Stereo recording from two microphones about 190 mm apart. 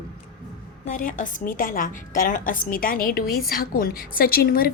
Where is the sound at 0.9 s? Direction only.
45° left (ahead or behind).